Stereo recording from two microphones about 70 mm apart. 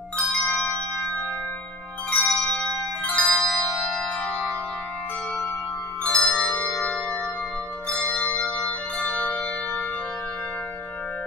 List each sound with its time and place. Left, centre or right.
0.4 s tubular bells: centre
2.1 s tubular bells: centre
3.1 s music: centre
6.0 s music: centre
8.6 s bell: centre